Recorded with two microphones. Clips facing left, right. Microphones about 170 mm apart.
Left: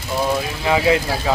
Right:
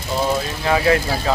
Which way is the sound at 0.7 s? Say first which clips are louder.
Even; 15° left (ahead or behind).